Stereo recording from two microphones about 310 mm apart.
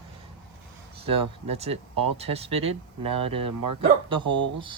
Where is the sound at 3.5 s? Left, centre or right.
Right.